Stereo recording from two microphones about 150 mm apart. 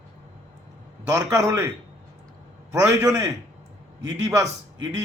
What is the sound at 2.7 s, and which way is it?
Speech, 20° right (ahead or behind).